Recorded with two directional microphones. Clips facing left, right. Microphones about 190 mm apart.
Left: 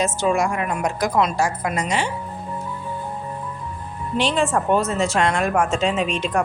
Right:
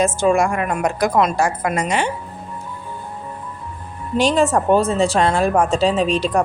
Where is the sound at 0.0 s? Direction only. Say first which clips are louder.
Right 4 dB; 50° right (ahead or behind).